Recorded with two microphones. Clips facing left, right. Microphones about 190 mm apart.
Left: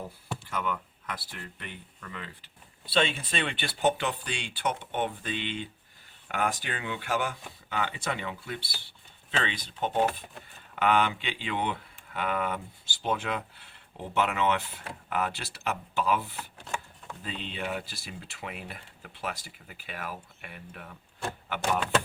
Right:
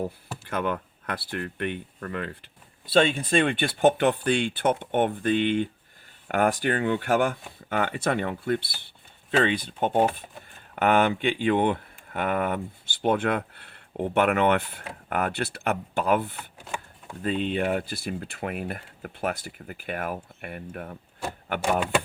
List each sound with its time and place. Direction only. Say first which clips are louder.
0.4 s speech: right 6 dB; 65° right (ahead or behind)
2.9 s speech: right 7 dB; 45° right (ahead or behind)